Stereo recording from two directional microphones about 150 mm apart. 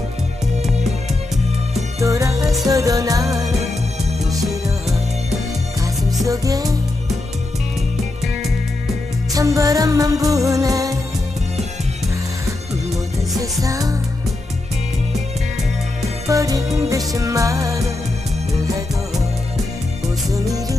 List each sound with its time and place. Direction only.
2.0 s music: 20° right (ahead or behind)
6.2 s music: 25° right (ahead or behind)
9.3 s music: 20° right (ahead or behind)
13.4 s music: 20° right (ahead or behind)
16.2 s music: 20° right (ahead or behind)
20.3 s music: 25° right (ahead or behind)